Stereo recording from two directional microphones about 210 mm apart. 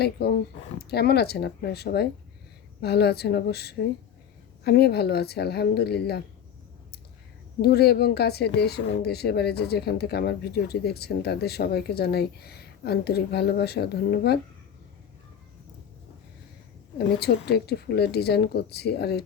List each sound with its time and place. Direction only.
0.0 s speech: 50° left (ahead or behind)
7.6 s speech: 50° left (ahead or behind)
17.2 s speech: 50° left (ahead or behind)